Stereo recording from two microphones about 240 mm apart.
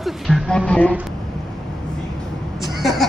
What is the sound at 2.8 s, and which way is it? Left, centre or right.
Hubbub, centre.